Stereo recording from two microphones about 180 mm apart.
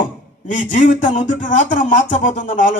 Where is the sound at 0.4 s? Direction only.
45° left (ahead or behind).